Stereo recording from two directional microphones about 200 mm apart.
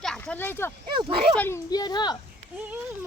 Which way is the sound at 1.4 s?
15° left (ahead or behind).